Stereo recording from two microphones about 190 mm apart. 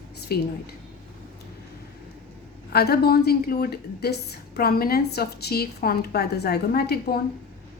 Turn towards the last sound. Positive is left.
turn(degrees=55)  # may be behind; listen again after turning